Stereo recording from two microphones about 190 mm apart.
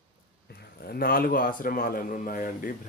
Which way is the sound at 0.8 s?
55° left (ahead or behind).